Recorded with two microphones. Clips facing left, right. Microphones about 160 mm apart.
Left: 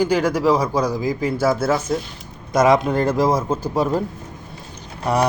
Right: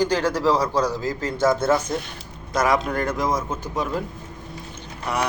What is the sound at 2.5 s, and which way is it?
A man's voice, 20° left (ahead or behind).